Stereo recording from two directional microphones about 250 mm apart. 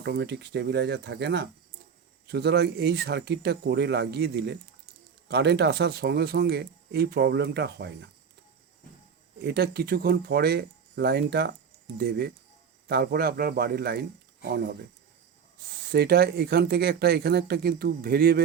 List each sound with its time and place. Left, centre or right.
0.0 s speech: right
9.4 s speech: right
15.9 s speech: right